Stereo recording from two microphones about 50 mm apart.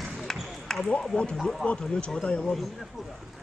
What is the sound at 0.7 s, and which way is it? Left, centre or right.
Ping, centre.